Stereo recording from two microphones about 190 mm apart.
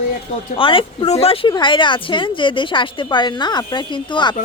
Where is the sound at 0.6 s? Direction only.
30° left (ahead or behind).